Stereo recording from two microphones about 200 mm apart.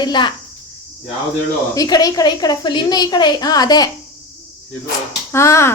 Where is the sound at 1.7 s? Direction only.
20° left (ahead or behind).